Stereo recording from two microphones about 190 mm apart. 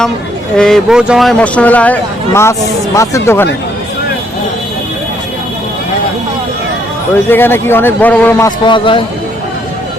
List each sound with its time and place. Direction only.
0.5 s speech: 5° left (ahead or behind)
7.3 s speech: 10° left (ahead or behind)
8.4 s a man's voice: 25° left (ahead or behind)